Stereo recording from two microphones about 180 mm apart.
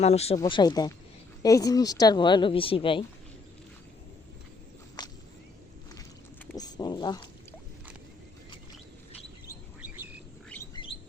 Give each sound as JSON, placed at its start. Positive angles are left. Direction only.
{"t": 0.0, "sound": "speech", "side_deg": 35}
{"t": 0.3, "sound": "speech", "side_deg": 25}
{"t": 5.0, "sound": "whip", "side_deg": 25}
{"t": 6.6, "sound": "a sound", "side_deg": 20}
{"t": 9.8, "sound": "bird", "side_deg": -10}